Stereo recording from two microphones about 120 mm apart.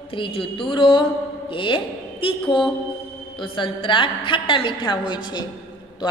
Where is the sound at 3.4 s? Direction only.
45° left (ahead or behind).